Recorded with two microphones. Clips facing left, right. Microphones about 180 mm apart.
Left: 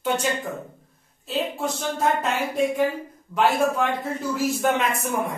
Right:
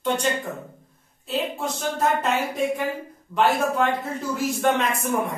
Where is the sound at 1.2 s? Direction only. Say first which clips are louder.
Even; centre (ahead or behind).